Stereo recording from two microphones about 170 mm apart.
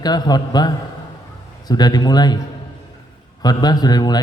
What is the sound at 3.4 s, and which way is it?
Speech, 25° left (ahead or behind).